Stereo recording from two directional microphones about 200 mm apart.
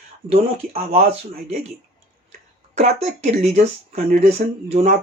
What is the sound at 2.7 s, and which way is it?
Speech, 35° right (ahead or behind).